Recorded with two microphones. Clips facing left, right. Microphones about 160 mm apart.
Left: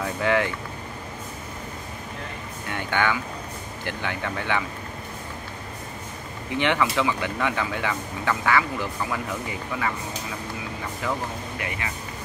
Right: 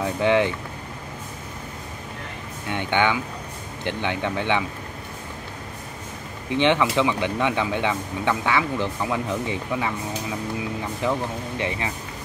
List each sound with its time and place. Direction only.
0.0 s speech: 20° right (ahead or behind)
2.7 s speech: 20° right (ahead or behind)
6.5 s speech: 20° right (ahead or behind)
11.0 s speech: 25° right (ahead or behind)